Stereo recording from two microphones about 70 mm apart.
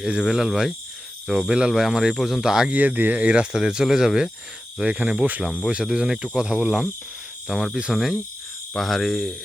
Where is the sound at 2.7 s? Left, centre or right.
Right.